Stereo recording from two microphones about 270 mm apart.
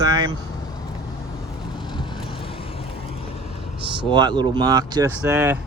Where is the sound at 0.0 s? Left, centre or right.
Centre.